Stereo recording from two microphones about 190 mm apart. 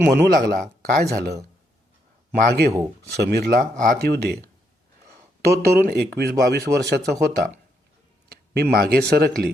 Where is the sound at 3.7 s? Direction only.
45° right (ahead or behind).